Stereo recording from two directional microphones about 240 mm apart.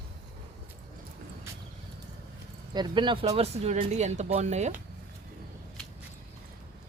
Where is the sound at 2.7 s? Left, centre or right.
Centre.